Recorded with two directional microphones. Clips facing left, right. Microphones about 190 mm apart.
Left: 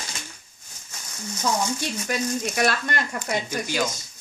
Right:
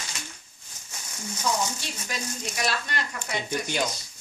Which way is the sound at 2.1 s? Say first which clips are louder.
Left 8 dB; 55° left (ahead or behind).